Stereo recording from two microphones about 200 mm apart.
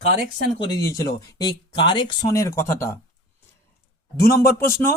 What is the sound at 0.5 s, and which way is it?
Speech, 15° left (ahead or behind).